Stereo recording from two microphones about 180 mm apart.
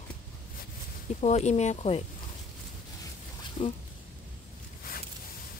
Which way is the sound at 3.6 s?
30° left (ahead or behind).